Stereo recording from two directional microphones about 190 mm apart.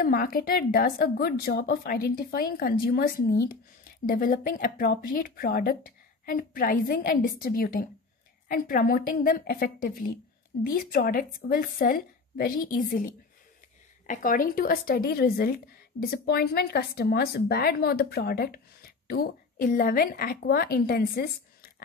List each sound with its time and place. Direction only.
0.0 s a woman's voice: 50° left (ahead or behind)